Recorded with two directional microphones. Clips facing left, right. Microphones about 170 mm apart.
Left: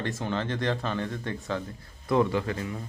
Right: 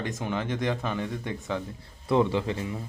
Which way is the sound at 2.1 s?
25° right (ahead or behind).